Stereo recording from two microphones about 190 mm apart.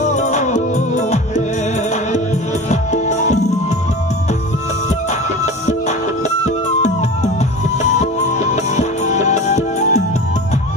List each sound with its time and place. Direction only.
0.0 s music: 40° left (ahead or behind)
2.7 s music: 40° left (ahead or behind)
5.4 s music: 35° left (ahead or behind)
8.0 s music: 35° left (ahead or behind)